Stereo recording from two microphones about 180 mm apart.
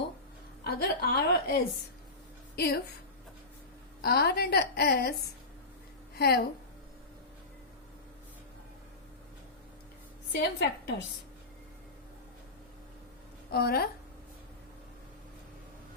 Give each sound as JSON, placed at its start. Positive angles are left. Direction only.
{"t": 0.6, "sound": "a woman's voice", "side_deg": 60}
{"t": 4.0, "sound": "a woman's voice", "side_deg": 60}
{"t": 10.3, "sound": "a woman's voice", "side_deg": 70}
{"t": 13.5, "sound": "a woman's voice", "side_deg": 60}